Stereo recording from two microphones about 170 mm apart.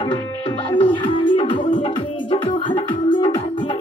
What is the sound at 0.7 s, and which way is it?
Music, 30° left (ahead or behind).